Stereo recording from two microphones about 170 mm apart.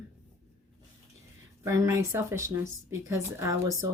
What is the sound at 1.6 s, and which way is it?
A woman's voice, 15° right (ahead or behind).